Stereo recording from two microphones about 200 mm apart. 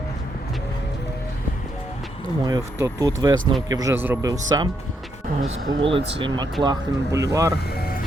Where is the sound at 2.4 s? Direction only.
15° right (ahead or behind).